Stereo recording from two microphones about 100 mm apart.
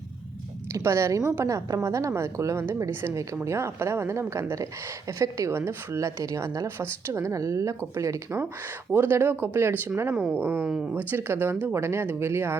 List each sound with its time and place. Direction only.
0.7 s a woman's voice: 30° right (ahead or behind)